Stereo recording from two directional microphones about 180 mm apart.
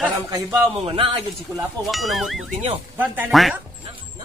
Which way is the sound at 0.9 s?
30° right (ahead or behind).